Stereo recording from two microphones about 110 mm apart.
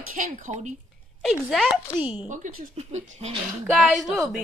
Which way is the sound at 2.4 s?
90° right.